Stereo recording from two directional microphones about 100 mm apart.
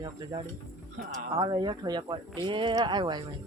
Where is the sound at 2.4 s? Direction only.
55° right (ahead or behind).